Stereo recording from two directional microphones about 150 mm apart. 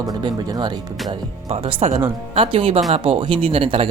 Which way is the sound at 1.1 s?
40° right (ahead or behind).